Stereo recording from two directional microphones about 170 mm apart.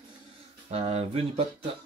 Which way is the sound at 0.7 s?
40° right (ahead or behind).